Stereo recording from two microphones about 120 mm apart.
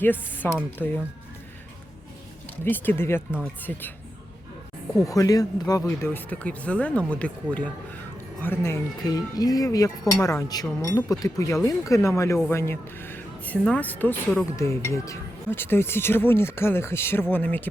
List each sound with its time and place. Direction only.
0.0 s speech: 15° left (ahead or behind)
2.6 s speech: 15° left (ahead or behind)
4.9 s speech: 30° left (ahead or behind)
6.1 s speech: 15° left (ahead or behind)
9.0 s speech: 30° left (ahead or behind); by 14.4 s 10° left (ahead or behind)
14.5 s speech: 25° left (ahead or behind)